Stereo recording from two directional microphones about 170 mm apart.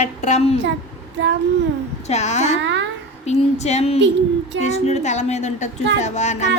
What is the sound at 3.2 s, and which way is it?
A woman's voice, 40° left (ahead or behind).